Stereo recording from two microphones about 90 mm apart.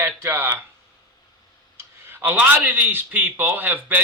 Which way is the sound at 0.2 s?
25° right (ahead or behind).